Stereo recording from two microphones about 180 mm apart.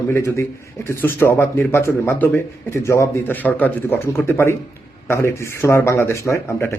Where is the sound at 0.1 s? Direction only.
15° left (ahead or behind).